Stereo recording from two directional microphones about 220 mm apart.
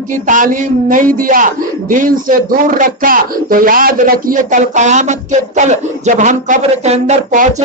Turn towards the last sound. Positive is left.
turn(degrees=-35)  # may be behind; listen again after turning